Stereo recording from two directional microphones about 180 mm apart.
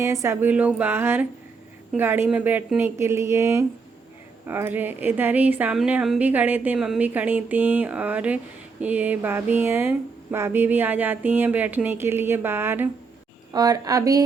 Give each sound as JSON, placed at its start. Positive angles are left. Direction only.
{"t": 0.0, "sound": "speech", "side_deg": -15}